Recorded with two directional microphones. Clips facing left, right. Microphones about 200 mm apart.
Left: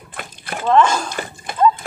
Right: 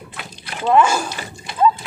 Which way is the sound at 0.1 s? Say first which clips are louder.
Left 8 dB; 50° left (ahead or behind).